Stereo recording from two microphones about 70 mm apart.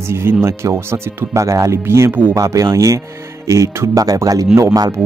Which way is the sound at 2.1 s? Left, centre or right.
Right.